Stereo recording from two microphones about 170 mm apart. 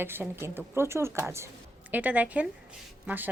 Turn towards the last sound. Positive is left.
turn(degrees=-10)  # may be behind; listen again after turning